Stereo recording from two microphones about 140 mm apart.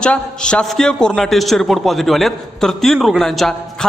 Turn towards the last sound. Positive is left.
turn(degrees=0)  # may be behind; listen again after turning